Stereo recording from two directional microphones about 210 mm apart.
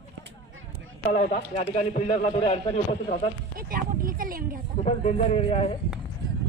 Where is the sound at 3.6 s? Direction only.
45° right (ahead or behind).